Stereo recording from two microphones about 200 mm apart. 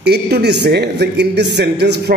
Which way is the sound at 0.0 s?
55° right (ahead or behind).